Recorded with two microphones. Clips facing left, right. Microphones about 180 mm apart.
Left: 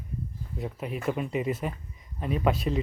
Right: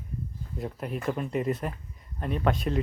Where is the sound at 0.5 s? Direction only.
Centre (ahead or behind).